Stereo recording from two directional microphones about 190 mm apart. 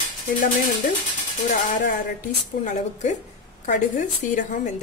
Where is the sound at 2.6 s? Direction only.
40° left (ahead or behind).